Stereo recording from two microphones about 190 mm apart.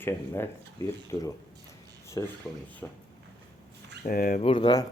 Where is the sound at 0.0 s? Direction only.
15° left (ahead or behind).